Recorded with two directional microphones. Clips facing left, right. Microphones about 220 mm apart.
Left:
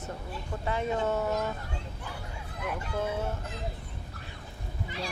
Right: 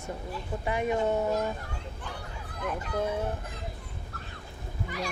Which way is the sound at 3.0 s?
15° right (ahead or behind).